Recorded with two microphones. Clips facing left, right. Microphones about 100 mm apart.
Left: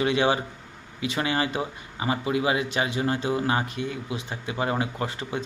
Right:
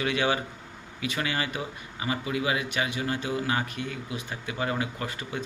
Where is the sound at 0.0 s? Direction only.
25° left (ahead or behind).